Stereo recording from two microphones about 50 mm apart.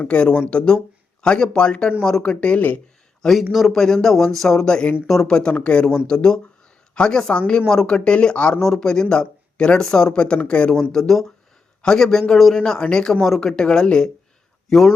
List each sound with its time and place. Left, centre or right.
0.0 s speech: left
3.2 s speech: centre
5.0 s speech: centre
5.3 s a woman's voice: centre
7.7 s speech: centre
8.6 s speech: centre
10.9 s speech: centre
12.5 s speech: centre
13.2 s speech: centre
13.5 s speech: centre
14.7 s speech: centre